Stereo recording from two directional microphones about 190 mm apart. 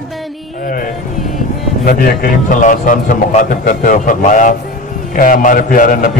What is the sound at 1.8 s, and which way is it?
A man's voice, 50° left (ahead or behind).